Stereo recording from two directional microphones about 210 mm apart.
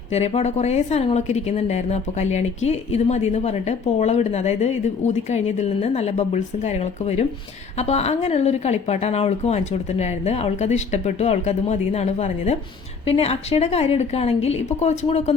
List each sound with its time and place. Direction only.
0.1 s a woman's voice: 30° left (ahead or behind)